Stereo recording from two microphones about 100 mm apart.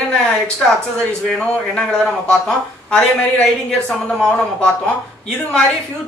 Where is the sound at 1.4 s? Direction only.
10° left (ahead or behind).